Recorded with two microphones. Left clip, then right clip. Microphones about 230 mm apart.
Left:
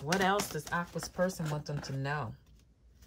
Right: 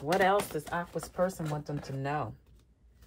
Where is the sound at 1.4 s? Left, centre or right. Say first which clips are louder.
Right 2 dB; centre.